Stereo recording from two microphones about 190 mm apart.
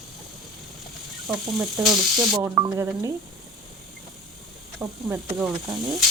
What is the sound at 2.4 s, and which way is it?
Speech, 15° right (ahead or behind).